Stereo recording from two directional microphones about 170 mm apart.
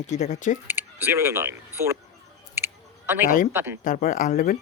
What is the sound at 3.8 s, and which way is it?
Speech, 50° left (ahead or behind).